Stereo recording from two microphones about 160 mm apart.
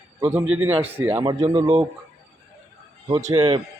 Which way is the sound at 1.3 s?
25° right (ahead or behind).